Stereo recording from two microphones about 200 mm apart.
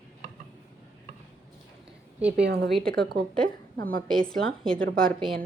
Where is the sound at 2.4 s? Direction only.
55° right (ahead or behind).